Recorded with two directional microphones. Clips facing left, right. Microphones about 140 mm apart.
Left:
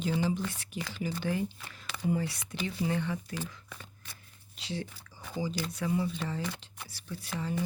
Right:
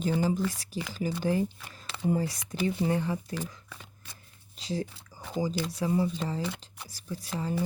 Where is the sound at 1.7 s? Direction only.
30° right (ahead or behind).